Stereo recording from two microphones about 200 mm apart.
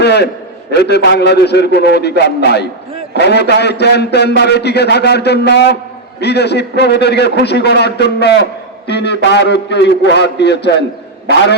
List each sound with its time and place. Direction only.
0.0 s a man's voice: 55° left (ahead or behind)